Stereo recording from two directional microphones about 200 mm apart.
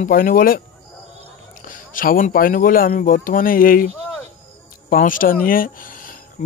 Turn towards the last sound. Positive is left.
turn(degrees=35)  # may be behind; listen again after turning